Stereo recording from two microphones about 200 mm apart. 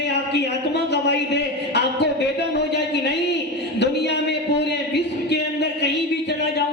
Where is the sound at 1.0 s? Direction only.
55° left (ahead or behind).